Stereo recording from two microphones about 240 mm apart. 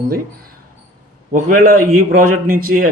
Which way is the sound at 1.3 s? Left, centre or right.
Right.